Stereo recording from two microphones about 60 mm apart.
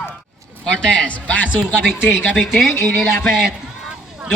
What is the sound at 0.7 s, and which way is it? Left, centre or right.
Speech, centre.